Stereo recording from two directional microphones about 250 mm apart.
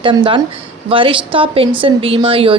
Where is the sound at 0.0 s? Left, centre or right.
Centre.